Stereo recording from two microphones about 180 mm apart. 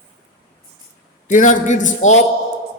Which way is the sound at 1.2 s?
45° left (ahead or behind).